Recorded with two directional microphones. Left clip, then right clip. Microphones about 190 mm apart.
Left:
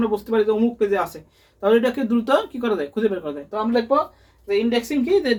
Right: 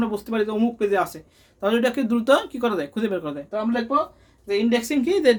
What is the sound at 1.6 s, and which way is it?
Speech, 35° right (ahead or behind).